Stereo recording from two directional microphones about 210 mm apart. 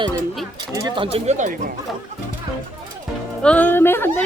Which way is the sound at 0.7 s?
20° right (ahead or behind).